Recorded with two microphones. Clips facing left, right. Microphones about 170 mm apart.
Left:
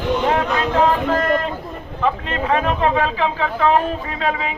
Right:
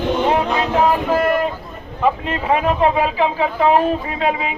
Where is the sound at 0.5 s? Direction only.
10° right (ahead or behind).